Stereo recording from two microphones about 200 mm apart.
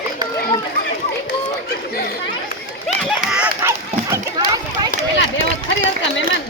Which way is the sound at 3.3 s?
10° right (ahead or behind).